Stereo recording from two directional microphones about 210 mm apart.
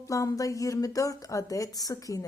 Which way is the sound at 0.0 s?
15° left (ahead or behind).